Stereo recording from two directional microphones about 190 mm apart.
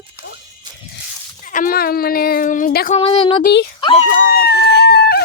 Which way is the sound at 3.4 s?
60° left (ahead or behind).